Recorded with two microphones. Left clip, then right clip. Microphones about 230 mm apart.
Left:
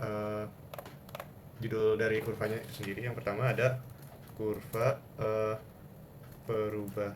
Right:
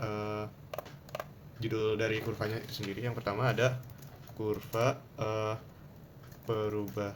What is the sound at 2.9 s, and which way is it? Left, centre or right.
Speech, right.